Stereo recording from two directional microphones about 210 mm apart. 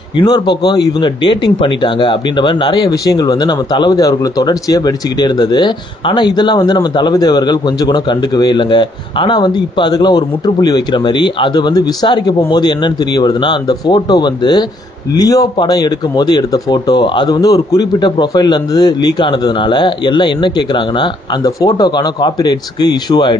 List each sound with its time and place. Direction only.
0.2 s speech: 20° left (ahead or behind)